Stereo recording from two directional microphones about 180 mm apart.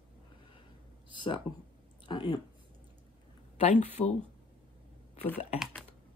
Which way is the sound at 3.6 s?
40° left (ahead or behind).